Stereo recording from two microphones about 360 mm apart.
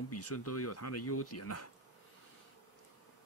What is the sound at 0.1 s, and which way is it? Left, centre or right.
Speech, left.